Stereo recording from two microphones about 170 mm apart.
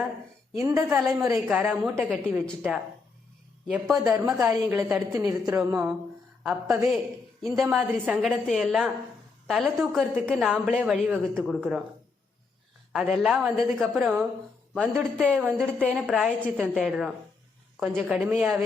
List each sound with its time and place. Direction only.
0.6 s a woman's voice: 20° right (ahead or behind)
0.9 s a woman's voice: 10° right (ahead or behind)
4.4 s a woman's voice: 15° right (ahead or behind)
5.5 s a woman's voice: 20° right (ahead or behind)
7.4 s a woman's voice: centre (ahead or behind)
12.9 s a woman's voice: 5° right (ahead or behind)
15.5 s a woman's voice: 5° left (ahead or behind)